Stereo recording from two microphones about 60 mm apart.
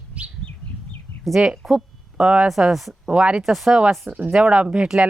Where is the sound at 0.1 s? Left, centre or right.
Right.